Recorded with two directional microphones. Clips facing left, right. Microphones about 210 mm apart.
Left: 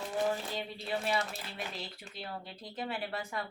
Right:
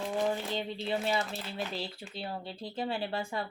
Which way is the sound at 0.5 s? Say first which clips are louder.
Right 4 dB; 25° right (ahead or behind).